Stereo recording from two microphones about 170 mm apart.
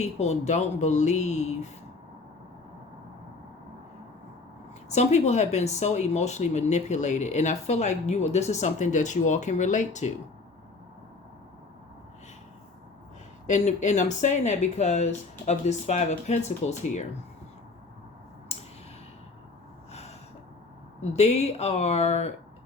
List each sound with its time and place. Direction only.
0.0 s speech: 40° left (ahead or behind)
4.9 s speech: 40° left (ahead or behind)
13.5 s speech: 45° left (ahead or behind)
19.9 s gasp: 40° left (ahead or behind)
21.0 s speech: 40° left (ahead or behind)